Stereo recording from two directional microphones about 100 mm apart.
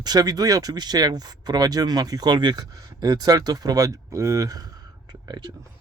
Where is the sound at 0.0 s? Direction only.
40° right (ahead or behind).